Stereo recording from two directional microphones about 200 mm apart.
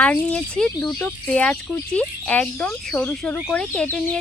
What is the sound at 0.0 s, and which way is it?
Speech, 5° left (ahead or behind).